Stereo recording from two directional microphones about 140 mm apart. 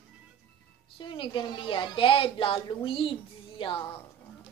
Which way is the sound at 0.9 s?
35° left (ahead or behind).